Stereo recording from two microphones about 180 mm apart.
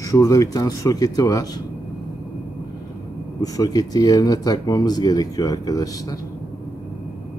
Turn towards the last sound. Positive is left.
turn(degrees=20)  # may be behind; listen again after turning